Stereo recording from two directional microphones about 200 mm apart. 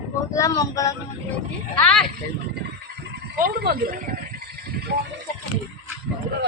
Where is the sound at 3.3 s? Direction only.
50° right (ahead or behind).